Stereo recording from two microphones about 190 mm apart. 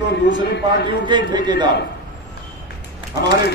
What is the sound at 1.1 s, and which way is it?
Speech, 25° right (ahead or behind).